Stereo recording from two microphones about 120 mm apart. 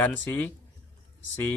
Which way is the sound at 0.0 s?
15° left (ahead or behind).